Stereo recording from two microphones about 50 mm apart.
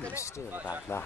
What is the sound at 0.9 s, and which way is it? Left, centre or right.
Speech, left.